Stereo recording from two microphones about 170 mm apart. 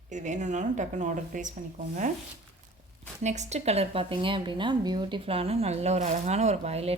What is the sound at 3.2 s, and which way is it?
Speech, 45° right (ahead or behind).